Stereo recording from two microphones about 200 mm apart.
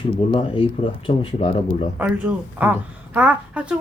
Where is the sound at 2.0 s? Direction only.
5° right (ahead or behind).